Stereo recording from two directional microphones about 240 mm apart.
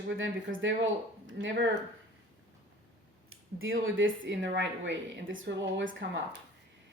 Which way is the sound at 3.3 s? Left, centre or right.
Right.